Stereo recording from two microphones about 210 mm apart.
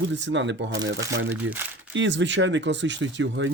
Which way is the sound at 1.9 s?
60° right (ahead or behind).